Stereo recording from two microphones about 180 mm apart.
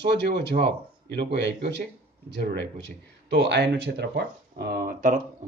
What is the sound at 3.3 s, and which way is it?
Speech, 70° right (ahead or behind).